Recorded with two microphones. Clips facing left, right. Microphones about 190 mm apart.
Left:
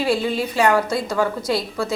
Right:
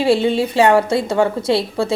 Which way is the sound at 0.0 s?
25° right (ahead or behind).